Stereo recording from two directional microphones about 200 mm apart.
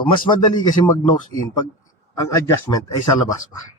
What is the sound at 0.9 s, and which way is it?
Speech, 20° left (ahead or behind).